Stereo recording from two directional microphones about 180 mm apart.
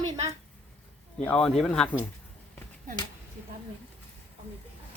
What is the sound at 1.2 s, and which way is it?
Speech, 10° left (ahead or behind).